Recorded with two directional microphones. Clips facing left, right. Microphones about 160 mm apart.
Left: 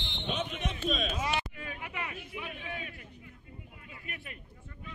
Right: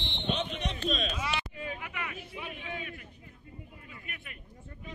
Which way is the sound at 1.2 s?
45° left (ahead or behind).